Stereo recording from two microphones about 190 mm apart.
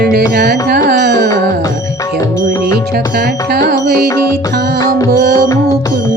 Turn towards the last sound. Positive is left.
turn(degrees=15)  # may be behind; listen again after turning